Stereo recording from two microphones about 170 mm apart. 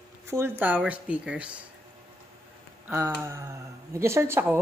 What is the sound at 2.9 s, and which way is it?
Speech, 15° right (ahead or behind).